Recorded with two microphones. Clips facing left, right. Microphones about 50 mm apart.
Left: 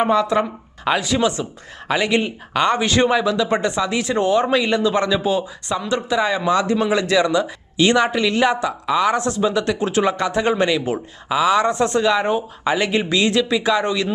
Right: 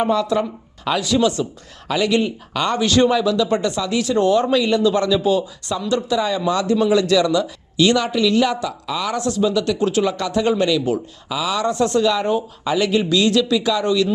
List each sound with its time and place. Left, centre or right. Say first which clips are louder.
0.0 s speech: left 1 dB; left